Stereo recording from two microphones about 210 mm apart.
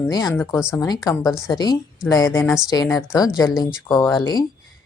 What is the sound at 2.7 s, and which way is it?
Speech, 15° left (ahead or behind).